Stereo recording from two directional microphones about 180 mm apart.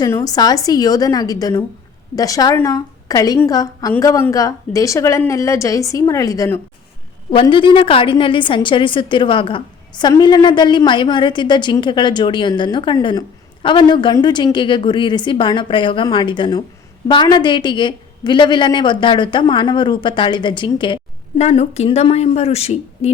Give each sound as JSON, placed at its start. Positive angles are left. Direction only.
{"t": 0.0, "sound": "a woman's voice", "side_deg": 20}
{"t": 7.3, "sound": "a woman's voice", "side_deg": 30}